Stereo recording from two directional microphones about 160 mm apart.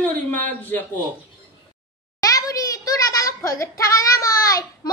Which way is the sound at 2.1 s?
20° left (ahead or behind).